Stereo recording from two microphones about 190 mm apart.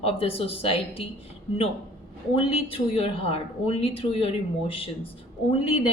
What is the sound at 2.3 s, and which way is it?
A woman's voice, 30° left (ahead or behind).